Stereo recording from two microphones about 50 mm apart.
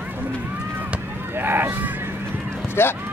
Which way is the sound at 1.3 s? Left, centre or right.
Right.